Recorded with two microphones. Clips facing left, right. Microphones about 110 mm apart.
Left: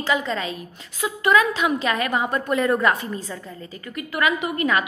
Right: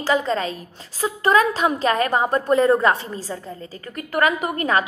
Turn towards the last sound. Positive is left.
turn(degrees=-40)  # may be behind; listen again after turning